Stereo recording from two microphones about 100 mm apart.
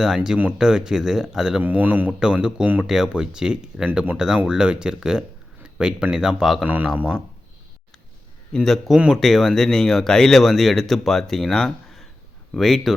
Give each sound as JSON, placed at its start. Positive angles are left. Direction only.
{"t": 0.0, "sound": "speech", "side_deg": -5}
{"t": 1.6, "sound": "a man's voice", "side_deg": -15}
{"t": 6.7, "sound": "a man's voice", "side_deg": -15}
{"t": 8.5, "sound": "speech", "side_deg": 0}